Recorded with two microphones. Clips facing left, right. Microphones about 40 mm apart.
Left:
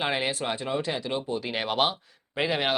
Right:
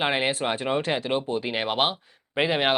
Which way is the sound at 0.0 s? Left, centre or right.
Right.